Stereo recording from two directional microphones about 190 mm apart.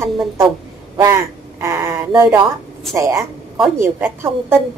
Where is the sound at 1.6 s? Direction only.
15° right (ahead or behind).